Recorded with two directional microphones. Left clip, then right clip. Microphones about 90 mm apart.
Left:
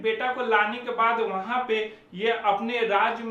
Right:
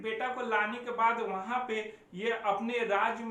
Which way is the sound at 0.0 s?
25° left (ahead or behind).